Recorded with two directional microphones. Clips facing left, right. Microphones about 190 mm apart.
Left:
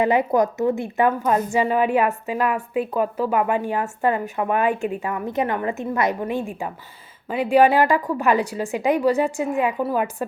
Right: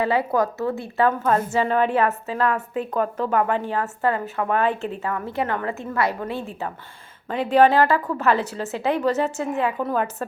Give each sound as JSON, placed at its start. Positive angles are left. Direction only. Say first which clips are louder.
{"t": 0.0, "sound": "a woman's voice", "louder": "left 3 dB", "side_deg": 20}